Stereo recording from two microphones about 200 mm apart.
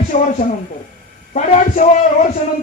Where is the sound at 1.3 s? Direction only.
40° left (ahead or behind).